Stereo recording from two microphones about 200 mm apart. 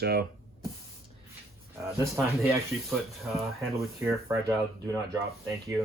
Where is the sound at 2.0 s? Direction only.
Centre (ahead or behind).